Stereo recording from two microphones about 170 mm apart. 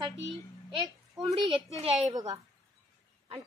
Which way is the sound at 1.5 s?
35° right (ahead or behind).